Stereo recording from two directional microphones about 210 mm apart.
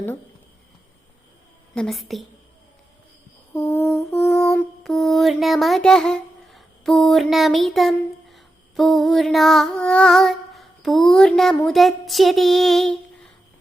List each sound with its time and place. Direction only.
1.7 s a woman's voice: centre (ahead or behind)
3.5 s lullaby: 10° left (ahead or behind)
4.8 s a sound: centre (ahead or behind)